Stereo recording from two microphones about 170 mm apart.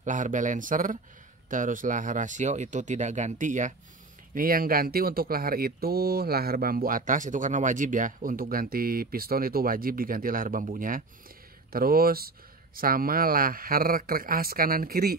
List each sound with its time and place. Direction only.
0.0 s speech: 50° right (ahead or behind)